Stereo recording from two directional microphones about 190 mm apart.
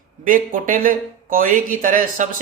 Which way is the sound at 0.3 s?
45° right (ahead or behind).